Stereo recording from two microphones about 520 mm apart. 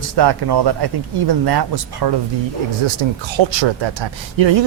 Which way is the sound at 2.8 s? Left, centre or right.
Right.